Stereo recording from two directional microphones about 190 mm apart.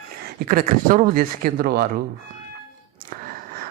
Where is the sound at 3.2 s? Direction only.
50° right (ahead or behind).